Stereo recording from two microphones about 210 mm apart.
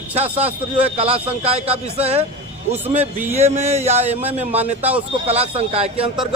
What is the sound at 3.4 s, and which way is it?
A man's voice, 30° right (ahead or behind).